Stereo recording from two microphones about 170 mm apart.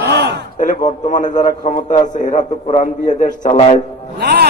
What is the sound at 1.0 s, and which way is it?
A man's voice, 50° left (ahead or behind).